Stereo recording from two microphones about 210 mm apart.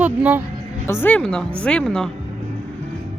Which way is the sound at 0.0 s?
10° right (ahead or behind).